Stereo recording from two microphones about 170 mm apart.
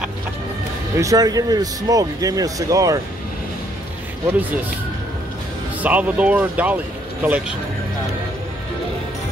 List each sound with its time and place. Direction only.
0.9 s speech: 20° right (ahead or behind)
5.8 s speech: 10° right (ahead or behind)